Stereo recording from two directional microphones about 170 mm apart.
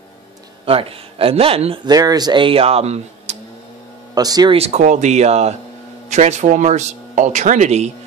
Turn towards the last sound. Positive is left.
turn(degrees=-40)  # may be behind; listen again after turning